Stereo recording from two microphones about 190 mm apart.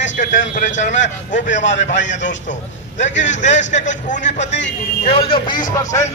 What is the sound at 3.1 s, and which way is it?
Speech, 70° left (ahead or behind).